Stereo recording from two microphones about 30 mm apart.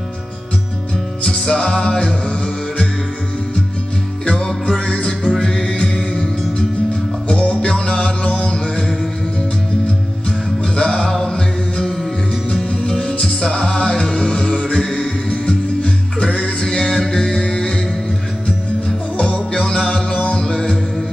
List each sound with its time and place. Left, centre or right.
1.2 s music: left
4.5 s music: left
7.2 s music: left
10.6 s music: left
16.6 s music: centre
19.1 s music: left
20.3 s music: left